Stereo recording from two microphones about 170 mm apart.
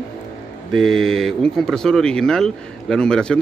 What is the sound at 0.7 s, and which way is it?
Speech, centre (ahead or behind).